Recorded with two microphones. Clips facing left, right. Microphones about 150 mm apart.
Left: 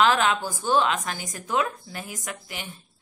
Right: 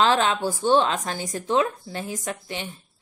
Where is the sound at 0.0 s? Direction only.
30° right (ahead or behind).